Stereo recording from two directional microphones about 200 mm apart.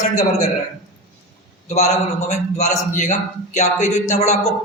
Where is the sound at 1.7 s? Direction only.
35° left (ahead or behind).